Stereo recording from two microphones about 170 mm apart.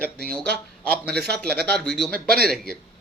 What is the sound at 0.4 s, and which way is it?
Speech, 70° right (ahead or behind).